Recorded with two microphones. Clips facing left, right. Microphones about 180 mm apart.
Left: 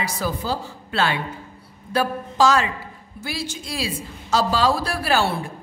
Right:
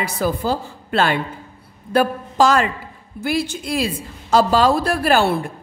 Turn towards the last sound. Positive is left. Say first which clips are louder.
# right 5 dB
turn(degrees=-55)  # may be behind; listen again after turning